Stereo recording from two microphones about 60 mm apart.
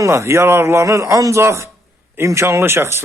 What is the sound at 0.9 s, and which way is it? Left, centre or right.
Speech, right.